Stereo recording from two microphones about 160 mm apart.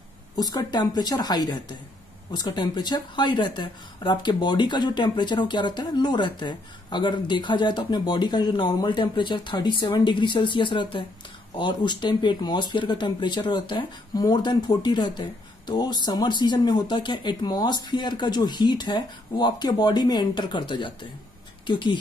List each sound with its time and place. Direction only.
0.4 s speech: 25° left (ahead or behind)